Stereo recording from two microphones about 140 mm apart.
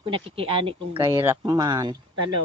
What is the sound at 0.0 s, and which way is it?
Speech, 40° right (ahead or behind).